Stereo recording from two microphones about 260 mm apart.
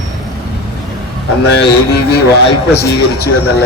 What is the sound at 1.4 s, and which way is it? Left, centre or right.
A man's voice, left.